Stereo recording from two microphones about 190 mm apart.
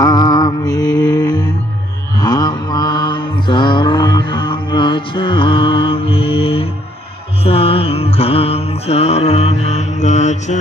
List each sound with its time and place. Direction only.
0.0 s mantra: 20° left (ahead or behind); by 10.6 s 40° left (ahead or behind)